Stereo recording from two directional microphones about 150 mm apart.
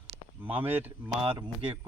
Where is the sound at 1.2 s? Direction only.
35° right (ahead or behind).